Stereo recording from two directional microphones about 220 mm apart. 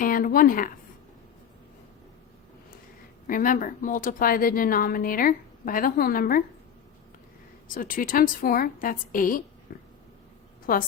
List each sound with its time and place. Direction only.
0.0 s speech: 40° left (ahead or behind)
3.2 s speech: 40° left (ahead or behind)
7.7 s speech: 40° left (ahead or behind)
9.7 s a sound: 35° left (ahead or behind)
10.7 s speech: 40° left (ahead or behind)